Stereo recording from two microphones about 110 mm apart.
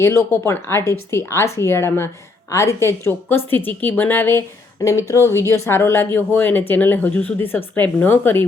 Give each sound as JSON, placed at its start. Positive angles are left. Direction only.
{"t": 0.0, "sound": "speech", "side_deg": 25}